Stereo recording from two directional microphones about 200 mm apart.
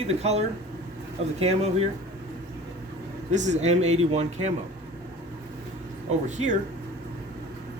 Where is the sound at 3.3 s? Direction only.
35° right (ahead or behind).